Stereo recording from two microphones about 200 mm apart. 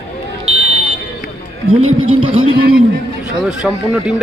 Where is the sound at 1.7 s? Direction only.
90° right.